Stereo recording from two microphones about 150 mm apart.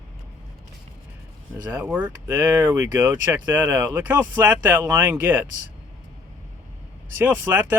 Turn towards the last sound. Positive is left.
turn(degrees=-15)  # may be behind; listen again after turning